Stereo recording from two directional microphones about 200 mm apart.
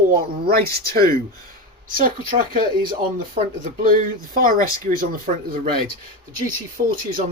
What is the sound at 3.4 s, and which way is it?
Speech, 35° right (ahead or behind).